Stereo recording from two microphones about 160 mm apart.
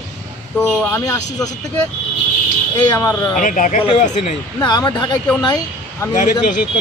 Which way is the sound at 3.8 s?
45° left (ahead or behind).